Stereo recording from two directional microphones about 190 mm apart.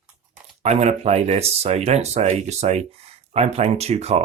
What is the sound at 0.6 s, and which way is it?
Speech, 35° right (ahead or behind).